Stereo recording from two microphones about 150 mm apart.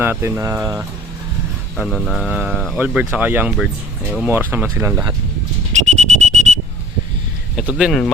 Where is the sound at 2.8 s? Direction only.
10° right (ahead or behind).